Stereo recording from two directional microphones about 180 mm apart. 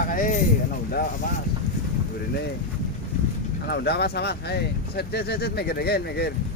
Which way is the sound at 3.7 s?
65° left (ahead or behind).